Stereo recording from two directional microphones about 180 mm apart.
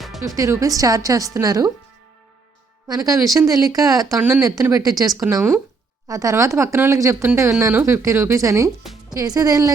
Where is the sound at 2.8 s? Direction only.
20° right (ahead or behind).